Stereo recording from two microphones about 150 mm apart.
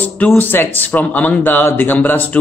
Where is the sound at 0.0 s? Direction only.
10° left (ahead or behind).